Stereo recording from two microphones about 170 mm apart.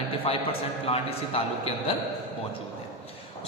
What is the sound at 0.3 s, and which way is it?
A man's voice, 35° left (ahead or behind).